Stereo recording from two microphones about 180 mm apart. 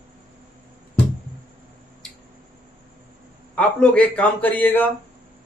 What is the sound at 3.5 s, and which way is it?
A man's voice, 5° left (ahead or behind).